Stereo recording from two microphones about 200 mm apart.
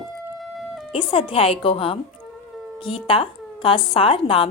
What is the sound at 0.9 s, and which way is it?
A woman's voice, 30° left (ahead or behind).